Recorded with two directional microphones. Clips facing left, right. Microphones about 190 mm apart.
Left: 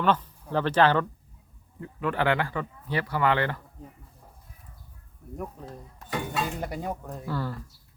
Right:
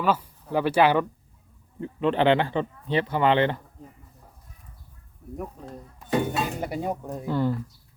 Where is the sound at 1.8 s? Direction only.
25° right (ahead or behind).